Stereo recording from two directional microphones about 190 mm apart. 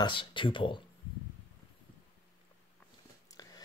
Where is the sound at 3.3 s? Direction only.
20° left (ahead or behind).